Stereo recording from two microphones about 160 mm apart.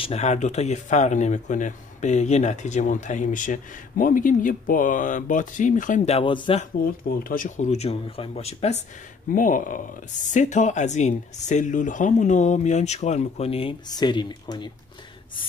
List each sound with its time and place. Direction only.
0.0 s speech: 45° left (ahead or behind)
7.2 s speech: 55° left (ahead or behind)
9.3 s speech: 55° left (ahead or behind); by 14.7 s 30° left (ahead or behind)